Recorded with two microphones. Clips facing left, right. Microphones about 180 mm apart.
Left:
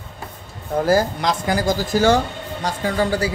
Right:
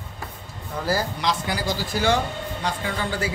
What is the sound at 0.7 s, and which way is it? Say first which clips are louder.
Speech: left 8 dB; 50° left (ahead or behind).